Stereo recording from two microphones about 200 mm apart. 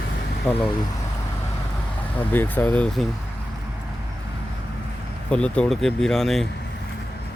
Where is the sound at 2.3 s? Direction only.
10° left (ahead or behind).